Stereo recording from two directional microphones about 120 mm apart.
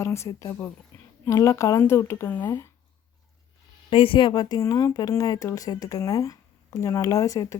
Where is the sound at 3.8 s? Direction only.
45° left (ahead or behind); by 7.6 s 30° left (ahead or behind).